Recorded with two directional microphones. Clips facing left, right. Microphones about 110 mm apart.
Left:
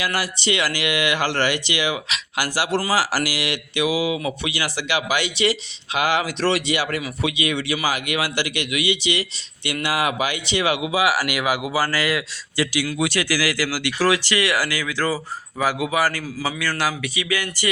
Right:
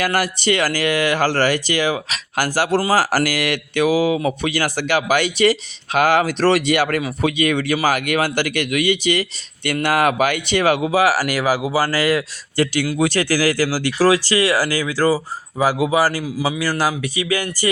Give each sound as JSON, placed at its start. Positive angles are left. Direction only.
{"t": 0.0, "sound": "speech", "side_deg": -50}
{"t": 16.2, "sound": "a man's voice", "side_deg": -15}
{"t": 16.6, "sound": "speech", "side_deg": -40}